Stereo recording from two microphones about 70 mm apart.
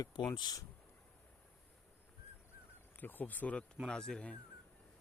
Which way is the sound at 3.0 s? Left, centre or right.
Left.